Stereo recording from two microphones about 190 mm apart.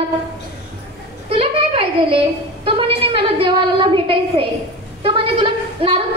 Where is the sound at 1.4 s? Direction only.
25° right (ahead or behind).